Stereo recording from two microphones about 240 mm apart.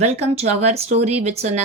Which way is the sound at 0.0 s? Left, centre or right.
Right.